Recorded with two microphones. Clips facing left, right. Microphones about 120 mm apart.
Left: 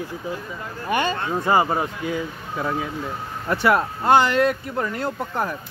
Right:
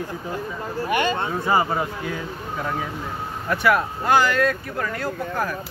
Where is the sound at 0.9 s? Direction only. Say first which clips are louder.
Even; 25° left (ahead or behind).